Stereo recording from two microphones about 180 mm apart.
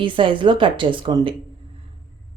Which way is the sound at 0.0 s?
30° right (ahead or behind).